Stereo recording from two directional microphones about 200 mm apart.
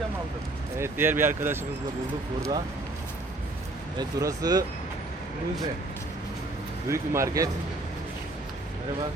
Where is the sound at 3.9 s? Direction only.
20° right (ahead or behind).